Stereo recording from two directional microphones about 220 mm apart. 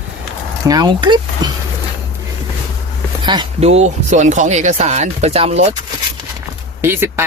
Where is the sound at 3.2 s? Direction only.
20° right (ahead or behind).